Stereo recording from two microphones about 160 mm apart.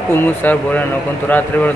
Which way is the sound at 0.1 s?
10° left (ahead or behind).